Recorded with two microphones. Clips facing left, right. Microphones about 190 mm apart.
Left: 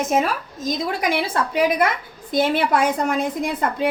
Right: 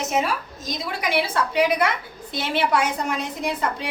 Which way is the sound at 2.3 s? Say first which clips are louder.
Left 4 dB; 50° left (ahead or behind).